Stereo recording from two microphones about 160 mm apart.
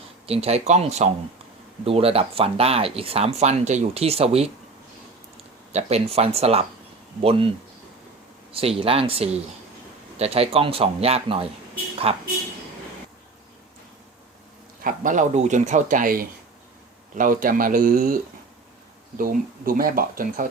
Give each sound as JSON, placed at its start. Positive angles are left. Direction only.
{"t": 0.3, "sound": "speech", "side_deg": -40}
{"t": 5.7, "sound": "speech", "side_deg": -40}
{"t": 8.5, "sound": "speech", "side_deg": -35}
{"t": 14.8, "sound": "speech", "side_deg": -55}